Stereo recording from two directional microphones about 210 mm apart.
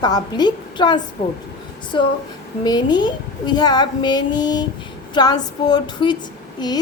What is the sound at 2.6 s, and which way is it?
A woman's voice, 20° left (ahead or behind).